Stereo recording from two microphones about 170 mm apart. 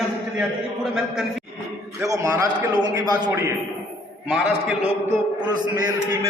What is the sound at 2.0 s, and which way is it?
A man's voice, 20° right (ahead or behind).